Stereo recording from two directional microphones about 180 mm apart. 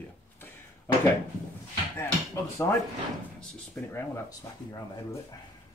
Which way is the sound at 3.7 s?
10° left (ahead or behind).